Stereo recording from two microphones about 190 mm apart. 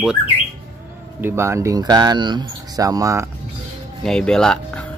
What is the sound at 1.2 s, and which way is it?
Speech, 10° right (ahead or behind).